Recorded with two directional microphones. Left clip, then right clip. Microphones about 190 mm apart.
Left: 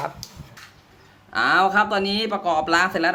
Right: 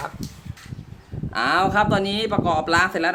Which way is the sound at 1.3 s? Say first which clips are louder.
Left 2 dB; centre (ahead or behind).